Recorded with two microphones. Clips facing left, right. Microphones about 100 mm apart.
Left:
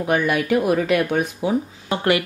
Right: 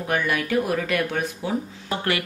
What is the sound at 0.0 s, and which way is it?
Speech, 20° left (ahead or behind).